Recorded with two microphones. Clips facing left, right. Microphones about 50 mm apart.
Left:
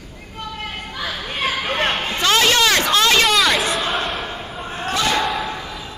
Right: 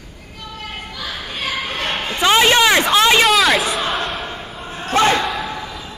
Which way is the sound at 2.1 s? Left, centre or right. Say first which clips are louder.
Right 5 dB; centre.